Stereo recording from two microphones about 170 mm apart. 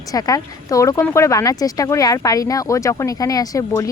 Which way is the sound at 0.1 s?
20° left (ahead or behind).